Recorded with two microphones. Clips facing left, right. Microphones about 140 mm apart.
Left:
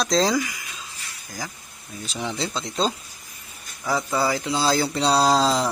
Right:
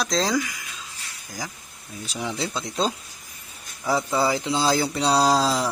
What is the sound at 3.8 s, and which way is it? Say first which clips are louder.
Speech: right 1 dB; centre (ahead or behind).